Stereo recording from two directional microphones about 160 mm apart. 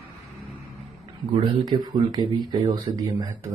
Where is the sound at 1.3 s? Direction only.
25° right (ahead or behind).